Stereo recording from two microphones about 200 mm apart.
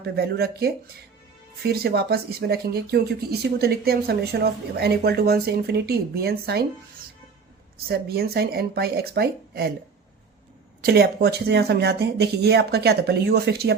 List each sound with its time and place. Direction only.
0.0 s speech: 50° right (ahead or behind)
1.7 s speech: 50° right (ahead or behind)
7.9 s speech: 50° right (ahead or behind)
10.8 s speech: 50° right (ahead or behind)